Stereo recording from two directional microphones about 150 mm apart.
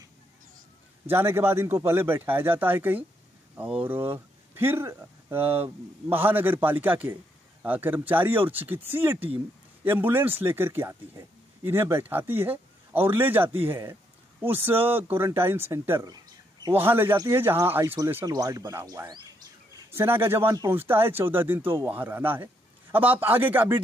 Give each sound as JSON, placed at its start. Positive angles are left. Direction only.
{"t": 1.0, "sound": "speech", "side_deg": -15}